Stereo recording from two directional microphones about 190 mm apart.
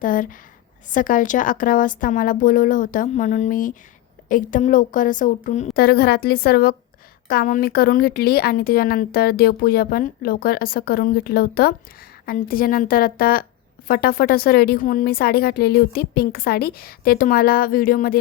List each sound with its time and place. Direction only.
0.0 s a woman's voice: 45° left (ahead or behind)
5.7 s a woman's voice: 55° left (ahead or behind)